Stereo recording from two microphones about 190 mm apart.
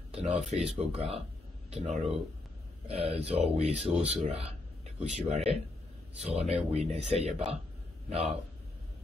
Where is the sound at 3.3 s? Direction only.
35° right (ahead or behind).